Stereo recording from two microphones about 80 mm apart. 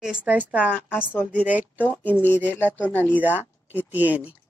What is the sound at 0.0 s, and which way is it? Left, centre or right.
Speech, centre.